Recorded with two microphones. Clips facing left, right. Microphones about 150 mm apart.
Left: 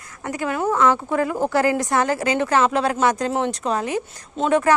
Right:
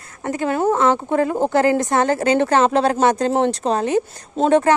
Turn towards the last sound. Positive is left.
turn(degrees=-30)  # may be behind; listen again after turning